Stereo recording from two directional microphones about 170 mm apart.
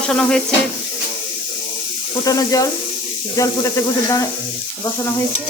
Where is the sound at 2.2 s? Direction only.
20° left (ahead or behind).